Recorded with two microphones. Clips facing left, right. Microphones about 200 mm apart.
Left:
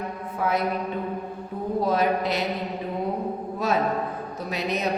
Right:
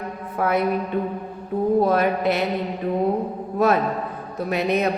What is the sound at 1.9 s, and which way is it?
Speech, 55° right (ahead or behind).